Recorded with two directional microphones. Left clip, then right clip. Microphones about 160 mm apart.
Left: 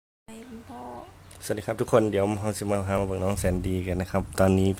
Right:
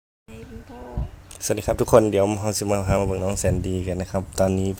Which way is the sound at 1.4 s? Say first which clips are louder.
Right 6 dB; 20° right (ahead or behind).